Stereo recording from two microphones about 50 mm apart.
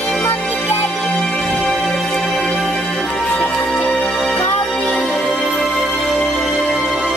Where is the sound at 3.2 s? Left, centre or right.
Left.